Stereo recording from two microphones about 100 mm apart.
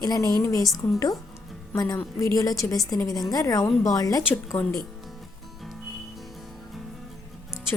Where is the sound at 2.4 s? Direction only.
35° left (ahead or behind).